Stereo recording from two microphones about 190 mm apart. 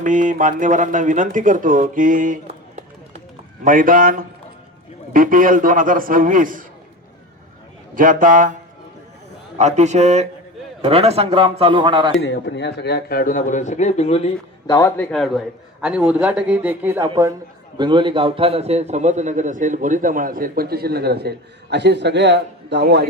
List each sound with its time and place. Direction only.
0.0 s a man's voice: 45° right (ahead or behind)
7.9 s a man's voice: 45° right (ahead or behind)
9.6 s a man's voice: 35° right (ahead or behind)
12.2 s a man's voice: 65° left (ahead or behind); by 14.3 s 35° left (ahead or behind)
14.7 s a man's voice: 15° left (ahead or behind)
15.8 s a man's voice: 5° right (ahead or behind)
17.7 s a man's voice: 25° right (ahead or behind); by 23.0 s 60° right (ahead or behind)